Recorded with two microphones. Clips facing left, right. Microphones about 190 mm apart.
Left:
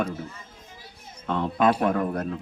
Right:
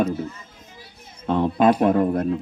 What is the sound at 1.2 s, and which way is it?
Speech, 30° right (ahead or behind).